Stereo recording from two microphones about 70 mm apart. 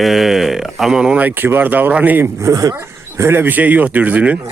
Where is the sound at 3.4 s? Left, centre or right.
Right.